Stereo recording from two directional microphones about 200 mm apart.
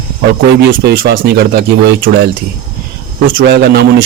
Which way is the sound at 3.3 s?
55° right (ahead or behind).